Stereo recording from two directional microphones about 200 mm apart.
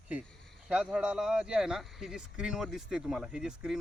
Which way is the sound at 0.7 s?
5° right (ahead or behind).